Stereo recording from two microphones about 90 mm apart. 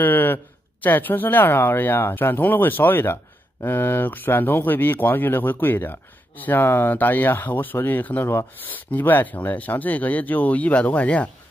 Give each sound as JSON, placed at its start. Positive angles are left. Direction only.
{"t": 0.0, "sound": "speech", "side_deg": 25}